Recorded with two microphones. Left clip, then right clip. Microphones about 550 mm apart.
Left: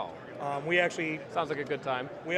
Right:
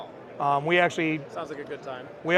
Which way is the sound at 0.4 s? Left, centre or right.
Right.